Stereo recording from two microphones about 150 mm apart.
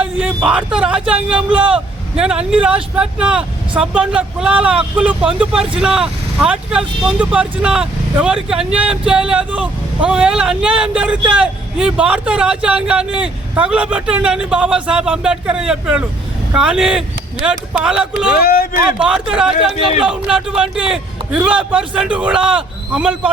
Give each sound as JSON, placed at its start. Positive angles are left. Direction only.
{"t": 0.0, "sound": "speech", "side_deg": -5}
{"t": 18.4, "sound": "speech", "side_deg": 75}
{"t": 18.9, "sound": "speech", "side_deg": -5}